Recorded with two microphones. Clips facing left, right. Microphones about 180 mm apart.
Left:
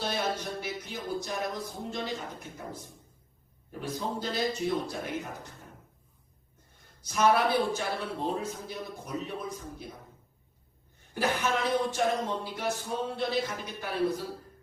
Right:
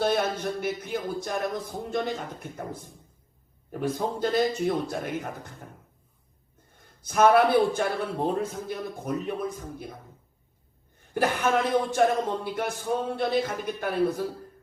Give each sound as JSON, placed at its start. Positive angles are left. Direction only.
{"t": 0.0, "sound": "a man's voice", "side_deg": -55}
{"t": 6.7, "sound": "a man's voice", "side_deg": -55}
{"t": 11.1, "sound": "a man's voice", "side_deg": -55}